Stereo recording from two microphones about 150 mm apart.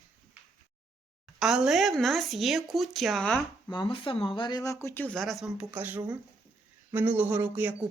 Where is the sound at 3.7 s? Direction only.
35° left (ahead or behind); by 5.1 s 15° left (ahead or behind).